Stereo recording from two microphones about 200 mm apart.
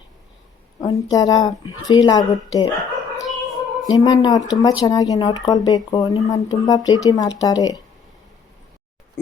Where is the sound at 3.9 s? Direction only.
20° left (ahead or behind).